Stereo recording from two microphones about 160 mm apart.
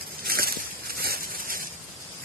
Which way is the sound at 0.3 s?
70° right (ahead or behind).